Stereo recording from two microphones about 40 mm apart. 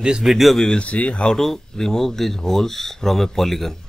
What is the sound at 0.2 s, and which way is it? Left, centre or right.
Speech, centre.